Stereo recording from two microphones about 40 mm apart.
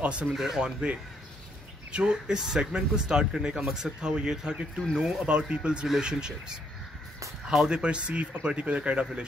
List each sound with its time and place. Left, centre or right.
0.0 s speech: right
0.3 s speech: centre
1.9 s speech: right